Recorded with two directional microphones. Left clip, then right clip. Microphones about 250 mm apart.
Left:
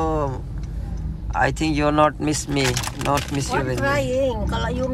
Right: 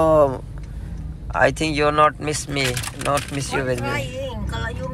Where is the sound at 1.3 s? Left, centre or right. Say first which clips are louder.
Right 2 dB; centre.